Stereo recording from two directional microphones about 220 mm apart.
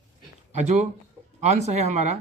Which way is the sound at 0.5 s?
30° right (ahead or behind).